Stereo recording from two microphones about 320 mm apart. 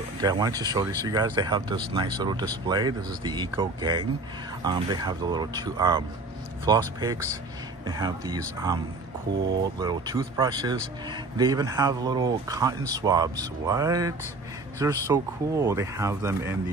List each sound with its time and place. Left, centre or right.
0.2 s speech: centre
9.3 s speech: right
9.8 s speech: centre